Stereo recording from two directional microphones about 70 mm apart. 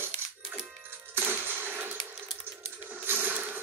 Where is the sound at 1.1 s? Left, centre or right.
Right.